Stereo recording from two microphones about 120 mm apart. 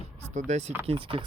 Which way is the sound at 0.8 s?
50° right (ahead or behind).